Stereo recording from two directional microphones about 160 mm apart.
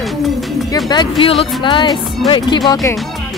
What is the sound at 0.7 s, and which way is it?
Speech, 25° left (ahead or behind).